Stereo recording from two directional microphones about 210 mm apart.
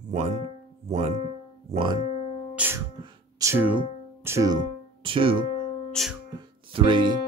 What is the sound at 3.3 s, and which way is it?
Speech, 10° right (ahead or behind).